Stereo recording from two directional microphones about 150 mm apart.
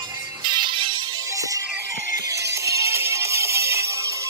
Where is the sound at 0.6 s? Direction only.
35° right (ahead or behind).